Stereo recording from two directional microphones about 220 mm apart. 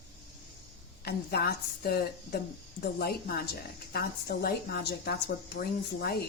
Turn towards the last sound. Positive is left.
turn(degrees=45)  # may be behind; listen again after turning